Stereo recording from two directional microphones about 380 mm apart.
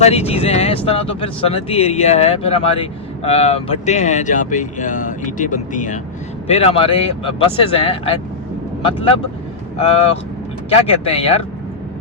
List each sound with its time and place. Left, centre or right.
0.0 s speech: centre